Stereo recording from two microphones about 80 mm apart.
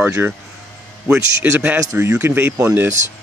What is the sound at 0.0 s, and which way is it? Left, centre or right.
A man's voice, right.